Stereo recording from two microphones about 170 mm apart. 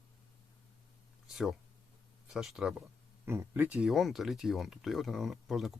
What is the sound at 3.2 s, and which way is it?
Speech, 15° right (ahead or behind).